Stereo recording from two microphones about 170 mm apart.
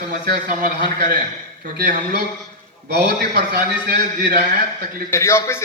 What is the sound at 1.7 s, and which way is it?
Speech, 65° right (ahead or behind).